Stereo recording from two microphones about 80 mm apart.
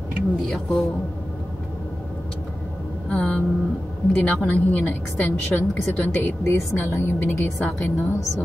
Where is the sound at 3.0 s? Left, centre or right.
Centre.